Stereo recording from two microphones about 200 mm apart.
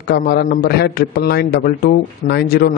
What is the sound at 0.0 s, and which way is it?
A man's voice, 50° left (ahead or behind).